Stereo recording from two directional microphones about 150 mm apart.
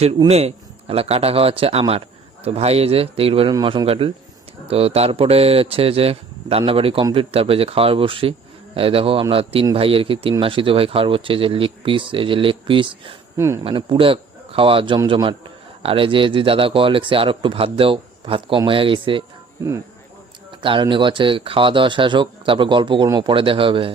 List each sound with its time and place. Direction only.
0.3 s speech: 45° right (ahead or behind)
3.5 s speech: 30° right (ahead or behind)
13.3 s speech: 20° right (ahead or behind)
13.7 s speech: 35° right (ahead or behind)
20.5 s speech: 35° right (ahead or behind)